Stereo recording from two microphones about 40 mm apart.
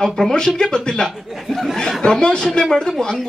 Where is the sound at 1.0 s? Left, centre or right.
Centre.